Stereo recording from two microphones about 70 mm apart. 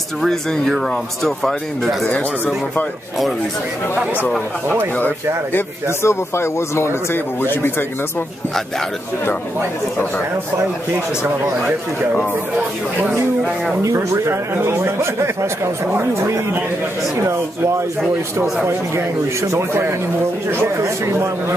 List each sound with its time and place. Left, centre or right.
0.2 s speech: centre
2.0 s speech: left
4.9 s speech: left
5.9 s speech: left
13.8 s speech: right
19.4 s speech: right